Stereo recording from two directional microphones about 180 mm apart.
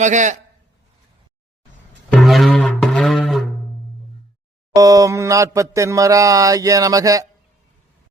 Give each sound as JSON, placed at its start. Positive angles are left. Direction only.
{"t": 0.0, "sound": "a man's voice", "side_deg": -40}
{"t": 2.1, "sound": "music", "side_deg": 0}
{"t": 4.7, "sound": "mantra", "side_deg": -20}